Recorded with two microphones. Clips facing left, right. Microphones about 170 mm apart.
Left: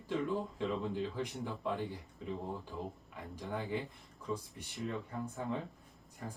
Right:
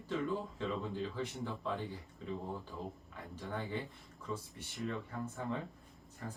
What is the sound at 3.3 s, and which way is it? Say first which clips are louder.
Speech: left 2 dB; 10° left (ahead or behind).